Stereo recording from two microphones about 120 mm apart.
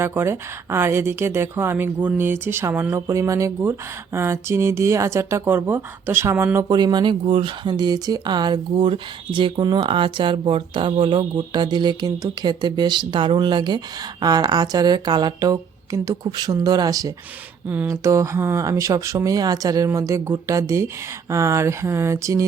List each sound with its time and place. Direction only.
0.0 s speech: 20° right (ahead or behind)
6.6 s speech: 35° right (ahead or behind)